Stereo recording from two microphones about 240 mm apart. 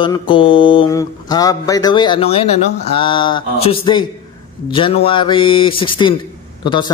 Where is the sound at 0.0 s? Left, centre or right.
Centre.